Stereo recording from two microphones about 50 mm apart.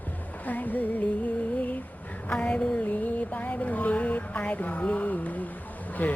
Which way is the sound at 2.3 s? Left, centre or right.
Centre.